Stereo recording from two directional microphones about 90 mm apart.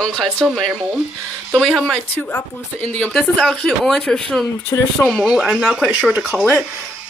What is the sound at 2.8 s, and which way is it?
Speech, 15° left (ahead or behind).